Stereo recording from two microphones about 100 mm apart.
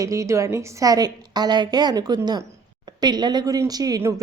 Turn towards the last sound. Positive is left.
turn(degrees=-40)  # may be behind; listen again after turning